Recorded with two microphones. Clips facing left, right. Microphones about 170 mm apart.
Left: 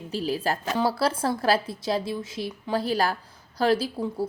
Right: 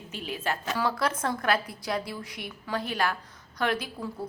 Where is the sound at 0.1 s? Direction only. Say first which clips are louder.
Left 6 dB; 35° left (ahead or behind).